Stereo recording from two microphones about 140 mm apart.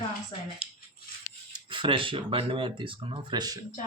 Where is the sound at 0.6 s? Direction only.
10° right (ahead or behind).